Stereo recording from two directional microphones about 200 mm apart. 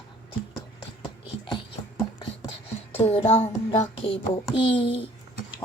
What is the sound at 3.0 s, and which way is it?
Music, 30° left (ahead or behind).